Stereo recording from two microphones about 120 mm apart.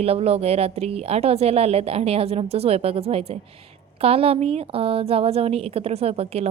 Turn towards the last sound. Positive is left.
turn(degrees=-60)  # may be behind; listen again after turning